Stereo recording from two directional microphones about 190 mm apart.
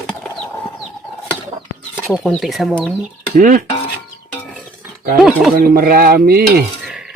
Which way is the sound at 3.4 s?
45° right (ahead or behind).